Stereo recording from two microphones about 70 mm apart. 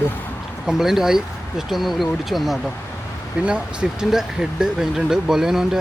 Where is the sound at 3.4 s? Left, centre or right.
Centre.